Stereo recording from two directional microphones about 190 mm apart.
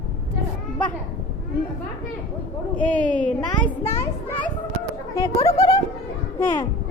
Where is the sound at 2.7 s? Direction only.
10° left (ahead or behind).